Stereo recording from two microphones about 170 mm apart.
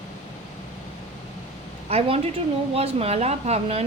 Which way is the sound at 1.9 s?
35° right (ahead or behind).